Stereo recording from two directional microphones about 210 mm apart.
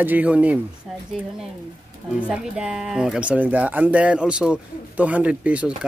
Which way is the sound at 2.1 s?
5° right (ahead or behind).